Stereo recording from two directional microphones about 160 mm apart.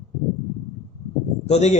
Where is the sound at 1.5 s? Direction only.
45° left (ahead or behind).